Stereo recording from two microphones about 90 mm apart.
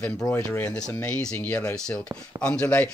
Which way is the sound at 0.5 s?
10° left (ahead or behind).